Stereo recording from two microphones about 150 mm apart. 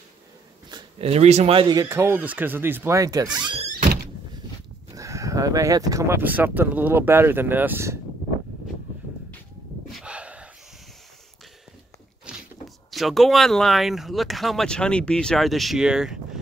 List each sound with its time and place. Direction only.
0.7 s a sound: 30° right (ahead or behind)
1.0 s speech: 45° right (ahead or behind)
1.8 s speech: 15° right (ahead or behind)
4.9 s speech: 20° right (ahead or behind)
9.9 s a sound: 10° right (ahead or behind)
12.3 s speech: centre (ahead or behind)